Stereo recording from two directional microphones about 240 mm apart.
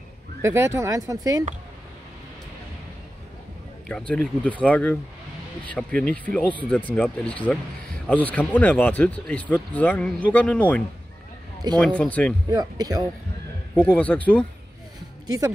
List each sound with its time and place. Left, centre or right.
0.4 s speech: centre
4.1 s speech: centre
11.8 s speech: centre
12.4 s speech: centre
13.7 s speech: centre
15.2 s speech: centre